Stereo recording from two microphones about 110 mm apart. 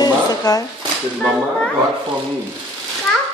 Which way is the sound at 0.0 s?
35° left (ahead or behind).